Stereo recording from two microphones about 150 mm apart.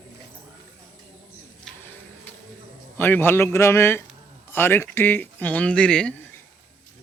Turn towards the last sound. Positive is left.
turn(degrees=10)  # may be behind; listen again after turning